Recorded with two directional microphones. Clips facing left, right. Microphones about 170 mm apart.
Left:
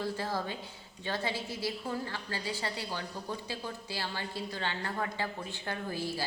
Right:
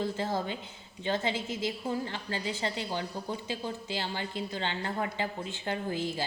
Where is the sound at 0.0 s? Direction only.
20° right (ahead or behind).